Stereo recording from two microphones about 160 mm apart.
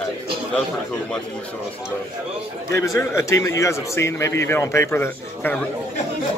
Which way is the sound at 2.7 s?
20° left (ahead or behind).